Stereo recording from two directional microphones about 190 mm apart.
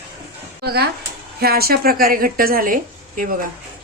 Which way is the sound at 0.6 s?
55° right (ahead or behind).